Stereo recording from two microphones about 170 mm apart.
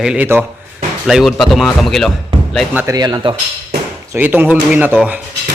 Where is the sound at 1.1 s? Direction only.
Centre (ahead or behind).